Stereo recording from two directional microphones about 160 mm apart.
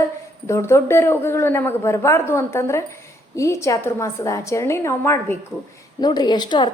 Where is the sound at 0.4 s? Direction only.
15° left (ahead or behind).